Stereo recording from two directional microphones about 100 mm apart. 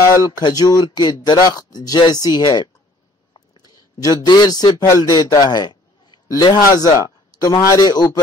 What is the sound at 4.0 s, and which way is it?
Speech, 40° left (ahead or behind).